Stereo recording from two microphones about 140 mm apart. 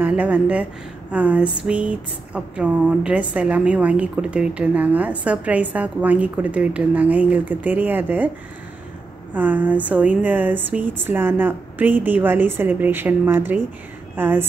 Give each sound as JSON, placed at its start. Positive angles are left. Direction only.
{"t": 0.0, "sound": "speech", "side_deg": -10}
{"t": 9.3, "sound": "speech", "side_deg": -10}